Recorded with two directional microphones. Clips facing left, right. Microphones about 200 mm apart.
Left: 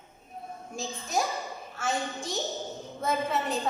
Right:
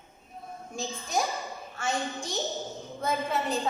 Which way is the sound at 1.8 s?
5° left (ahead or behind).